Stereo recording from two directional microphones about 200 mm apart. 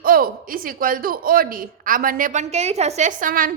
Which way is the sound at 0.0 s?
45° right (ahead or behind).